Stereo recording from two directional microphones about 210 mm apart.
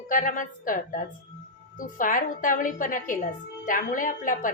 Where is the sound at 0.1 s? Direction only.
40° left (ahead or behind).